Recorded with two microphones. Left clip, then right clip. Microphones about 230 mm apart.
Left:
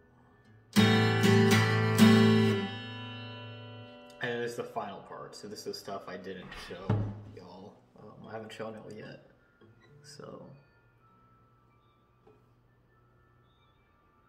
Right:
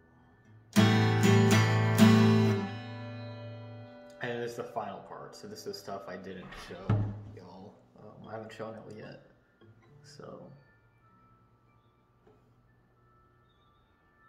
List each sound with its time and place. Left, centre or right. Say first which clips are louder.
0.7 s music: left 1 dB; centre
4.1 s speech: left 2 dB; centre
7.3 s a sound: left 1 dB; centre
10.0 s speech: left 1 dB; centre